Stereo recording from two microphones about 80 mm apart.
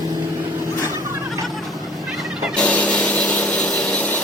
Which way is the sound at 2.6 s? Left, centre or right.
Centre.